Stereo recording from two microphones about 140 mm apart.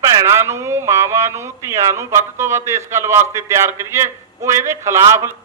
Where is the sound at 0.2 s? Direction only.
20° right (ahead or behind).